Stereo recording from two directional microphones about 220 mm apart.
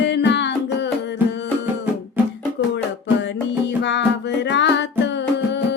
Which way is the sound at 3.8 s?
50° left (ahead or behind).